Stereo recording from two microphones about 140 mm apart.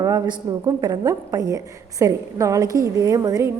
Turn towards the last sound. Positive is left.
turn(degrees=-25)  # may be behind; listen again after turning